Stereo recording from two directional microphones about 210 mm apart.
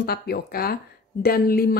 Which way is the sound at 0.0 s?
45° left (ahead or behind).